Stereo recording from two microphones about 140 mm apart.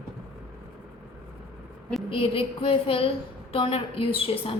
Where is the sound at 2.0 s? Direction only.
40° left (ahead or behind).